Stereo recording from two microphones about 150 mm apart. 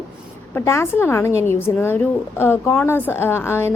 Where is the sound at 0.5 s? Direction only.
15° left (ahead or behind).